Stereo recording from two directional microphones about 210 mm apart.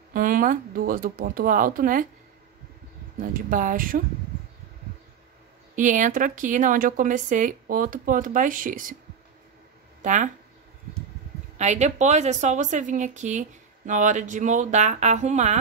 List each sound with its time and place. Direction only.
0.1 s a woman's voice: 40° right (ahead or behind)
3.2 s a woman's voice: 40° right (ahead or behind)
5.8 s a woman's voice: 35° right (ahead or behind)
10.0 s a woman's voice: 35° right (ahead or behind)
11.5 s a woman's voice: 35° right (ahead or behind)